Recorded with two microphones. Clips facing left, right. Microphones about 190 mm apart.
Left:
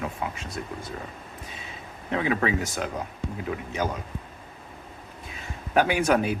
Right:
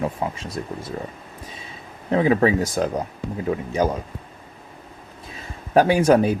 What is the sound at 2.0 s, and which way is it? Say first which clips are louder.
Speech: right 7 dB; 35° right (ahead or behind).